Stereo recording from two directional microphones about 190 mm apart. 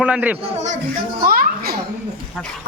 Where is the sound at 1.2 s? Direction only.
50° right (ahead or behind).